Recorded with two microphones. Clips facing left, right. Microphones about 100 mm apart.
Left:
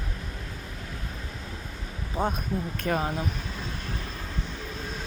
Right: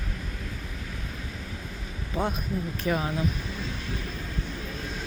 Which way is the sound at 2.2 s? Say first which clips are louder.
Left 2 dB; 45° left (ahead or behind).